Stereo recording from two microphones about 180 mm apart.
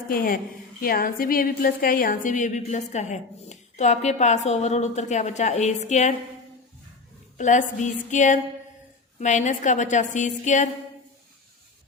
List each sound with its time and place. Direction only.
0.1 s a woman's voice: 50° left (ahead or behind)
7.3 s a woman's voice: 40° left (ahead or behind)